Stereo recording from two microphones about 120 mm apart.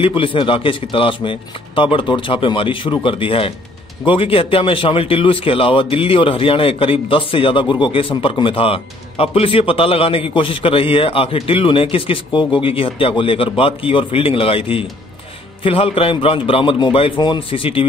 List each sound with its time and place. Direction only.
0.0 s speech: 45° left (ahead or behind)